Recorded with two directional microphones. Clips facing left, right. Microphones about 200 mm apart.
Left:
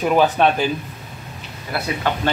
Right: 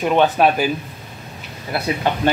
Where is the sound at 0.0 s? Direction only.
Centre (ahead or behind).